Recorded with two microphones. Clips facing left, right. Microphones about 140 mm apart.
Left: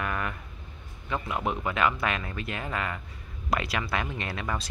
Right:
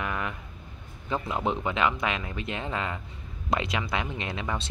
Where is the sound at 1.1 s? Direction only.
30° right (ahead or behind).